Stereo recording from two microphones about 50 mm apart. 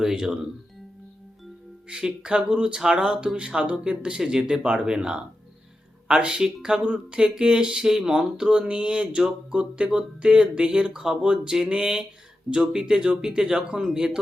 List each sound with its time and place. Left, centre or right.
0.0 s speech: centre
1.9 s speech: centre